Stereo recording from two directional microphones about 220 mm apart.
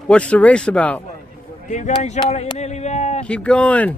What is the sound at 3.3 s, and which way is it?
Speech, 5° left (ahead or behind).